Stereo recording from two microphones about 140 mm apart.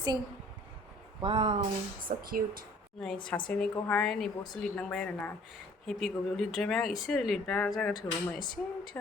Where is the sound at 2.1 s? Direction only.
90° right.